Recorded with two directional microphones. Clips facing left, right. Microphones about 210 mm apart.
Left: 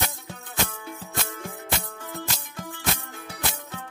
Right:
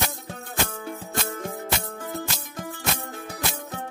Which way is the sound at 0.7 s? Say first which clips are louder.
Right 4 dB; 40° right (ahead or behind).